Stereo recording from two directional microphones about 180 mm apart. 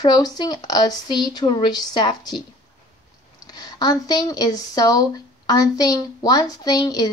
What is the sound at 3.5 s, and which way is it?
Speech, 20° left (ahead or behind).